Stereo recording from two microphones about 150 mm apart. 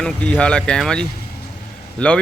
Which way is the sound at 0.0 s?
5° left (ahead or behind).